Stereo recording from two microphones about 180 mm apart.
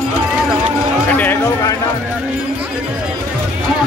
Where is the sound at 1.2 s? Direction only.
10° left (ahead or behind).